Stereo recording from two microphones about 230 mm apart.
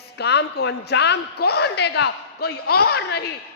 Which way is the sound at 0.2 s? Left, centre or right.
Left.